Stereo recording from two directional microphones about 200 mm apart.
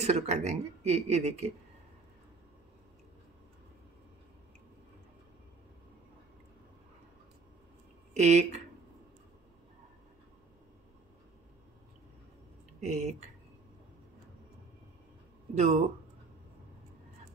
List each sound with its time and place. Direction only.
0.0 s speech: 35° right (ahead or behind)
8.1 s speech: 35° right (ahead or behind)
12.8 s speech: 35° right (ahead or behind)
15.5 s speech: 35° right (ahead or behind)